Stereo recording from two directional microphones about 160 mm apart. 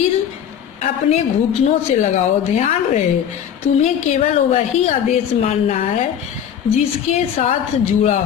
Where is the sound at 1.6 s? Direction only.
45° left (ahead or behind).